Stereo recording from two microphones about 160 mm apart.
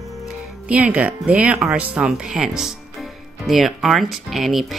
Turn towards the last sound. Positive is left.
turn(degrees=0)  # may be behind; listen again after turning